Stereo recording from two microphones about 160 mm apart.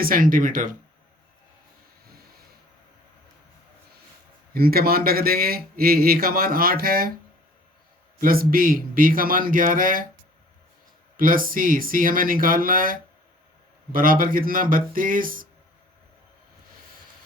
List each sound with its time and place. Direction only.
0.0 s a man's voice: 60° right (ahead or behind)
4.5 s a man's voice: 70° right (ahead or behind)
8.2 s a man's voice: 65° right (ahead or behind)
11.2 s a man's voice: 60° right (ahead or behind)